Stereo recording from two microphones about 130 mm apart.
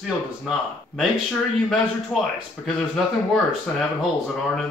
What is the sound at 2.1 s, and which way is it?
Speech, centre (ahead or behind).